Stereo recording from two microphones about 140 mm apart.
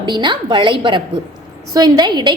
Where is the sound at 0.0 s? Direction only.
35° right (ahead or behind).